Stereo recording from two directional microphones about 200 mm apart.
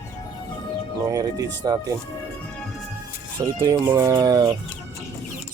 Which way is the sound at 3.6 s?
15° right (ahead or behind).